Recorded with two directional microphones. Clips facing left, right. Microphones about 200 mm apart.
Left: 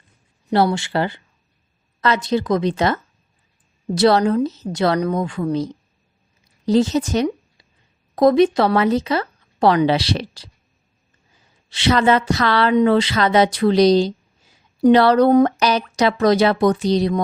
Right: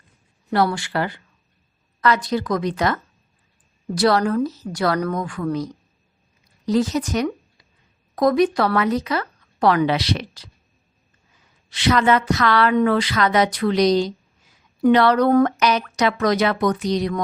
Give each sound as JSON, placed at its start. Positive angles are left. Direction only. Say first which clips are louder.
{"t": 0.5, "sound": "a woman's voice", "louder": "left 3 dB", "side_deg": 25}
{"t": 11.7, "sound": "a woman's voice", "louder": "left 2 dB", "side_deg": 30}